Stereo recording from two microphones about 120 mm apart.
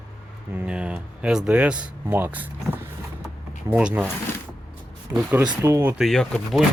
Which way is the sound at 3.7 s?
10° right (ahead or behind).